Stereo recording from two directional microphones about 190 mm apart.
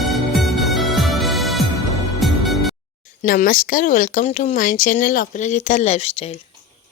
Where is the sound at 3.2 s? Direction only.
45° left (ahead or behind).